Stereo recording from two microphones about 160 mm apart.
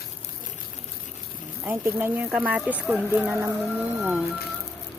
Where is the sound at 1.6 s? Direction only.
15° right (ahead or behind).